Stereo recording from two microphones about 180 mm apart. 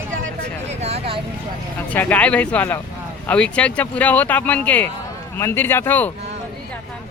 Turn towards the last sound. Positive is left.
turn(degrees=10)  # may be behind; listen again after turning